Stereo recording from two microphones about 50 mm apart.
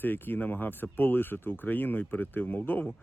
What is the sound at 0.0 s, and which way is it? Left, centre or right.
Speech, left.